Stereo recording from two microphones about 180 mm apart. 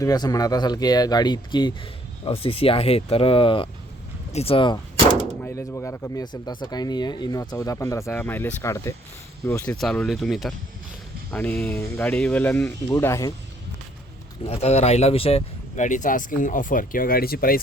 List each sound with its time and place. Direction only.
0.0 s speech: 20° left (ahead or behind)
5.4 s speech: 15° left (ahead or behind)
9.7 s speech: 5° left (ahead or behind)
14.4 s speech: 35° left (ahead or behind); by 17.6 s 55° left (ahead or behind)